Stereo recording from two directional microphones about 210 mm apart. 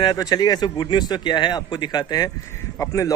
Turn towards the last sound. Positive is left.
turn(degrees=15)  # may be behind; listen again after turning